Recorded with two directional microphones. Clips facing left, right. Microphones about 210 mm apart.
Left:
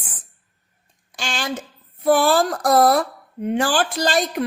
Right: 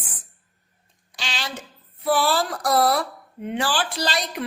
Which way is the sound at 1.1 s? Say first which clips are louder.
Left 6 dB; 50° left (ahead or behind).